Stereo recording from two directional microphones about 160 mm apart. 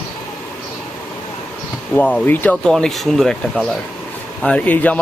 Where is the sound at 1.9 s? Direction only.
10° left (ahead or behind).